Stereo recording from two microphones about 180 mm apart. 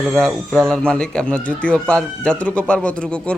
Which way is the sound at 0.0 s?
Centre (ahead or behind).